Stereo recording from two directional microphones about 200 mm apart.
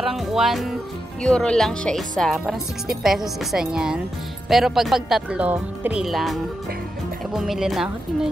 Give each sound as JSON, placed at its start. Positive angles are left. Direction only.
{"t": 0.0, "sound": "speech", "side_deg": 0}